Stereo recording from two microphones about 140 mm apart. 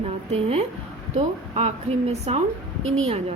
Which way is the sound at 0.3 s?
50° right (ahead or behind).